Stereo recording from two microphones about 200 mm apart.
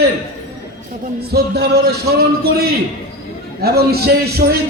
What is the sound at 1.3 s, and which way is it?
A man's voice, 50° right (ahead or behind).